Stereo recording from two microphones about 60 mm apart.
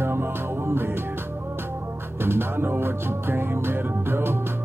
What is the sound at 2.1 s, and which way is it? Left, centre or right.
Music, right.